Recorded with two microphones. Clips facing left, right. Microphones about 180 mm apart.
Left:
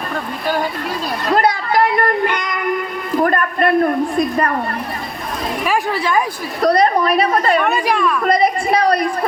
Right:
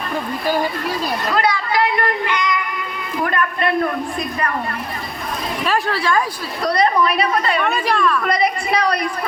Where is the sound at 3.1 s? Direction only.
45° left (ahead or behind).